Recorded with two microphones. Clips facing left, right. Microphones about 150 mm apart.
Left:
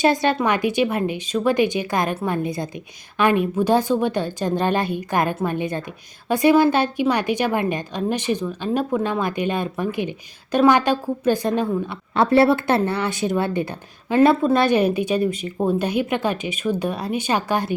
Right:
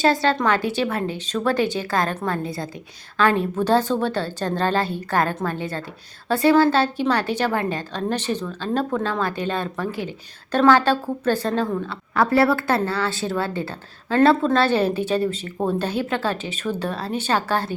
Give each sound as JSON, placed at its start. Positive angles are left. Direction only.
{"t": 0.0, "sound": "a woman's voice", "side_deg": 15}